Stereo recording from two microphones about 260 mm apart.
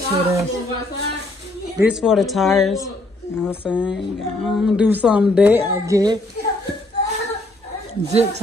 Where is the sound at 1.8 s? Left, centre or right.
Centre.